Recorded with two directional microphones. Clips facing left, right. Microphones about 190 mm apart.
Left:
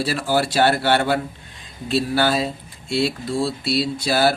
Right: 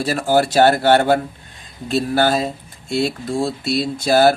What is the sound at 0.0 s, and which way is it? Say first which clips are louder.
Speech: right 4 dB; 45° right (ahead or behind).